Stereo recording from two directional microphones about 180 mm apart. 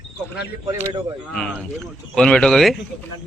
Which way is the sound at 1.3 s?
5° left (ahead or behind).